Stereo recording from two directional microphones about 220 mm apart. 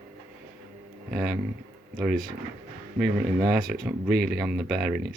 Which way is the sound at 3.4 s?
45° right (ahead or behind).